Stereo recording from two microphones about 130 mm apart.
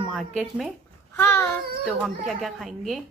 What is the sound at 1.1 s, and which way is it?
Child singing, 15° left (ahead or behind).